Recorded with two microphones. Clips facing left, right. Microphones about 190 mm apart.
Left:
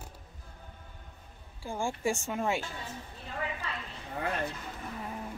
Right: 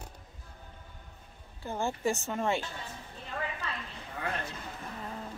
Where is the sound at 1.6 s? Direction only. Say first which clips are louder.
Right 1 dB; 10° left (ahead or behind).